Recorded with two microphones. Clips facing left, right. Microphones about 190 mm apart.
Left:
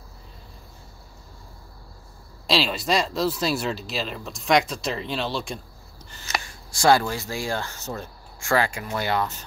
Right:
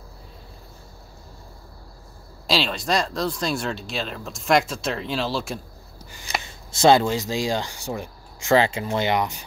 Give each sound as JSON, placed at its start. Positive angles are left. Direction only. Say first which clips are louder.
{"t": 2.4, "sound": "speech", "louder": "even", "side_deg": 0}
{"t": 6.3, "sound": "speech", "louder": "right 1 dB", "side_deg": -20}